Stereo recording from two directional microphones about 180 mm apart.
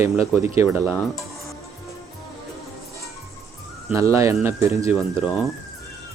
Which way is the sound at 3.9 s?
15° right (ahead or behind).